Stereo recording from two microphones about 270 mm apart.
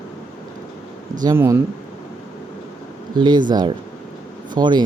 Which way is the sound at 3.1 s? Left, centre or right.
Centre.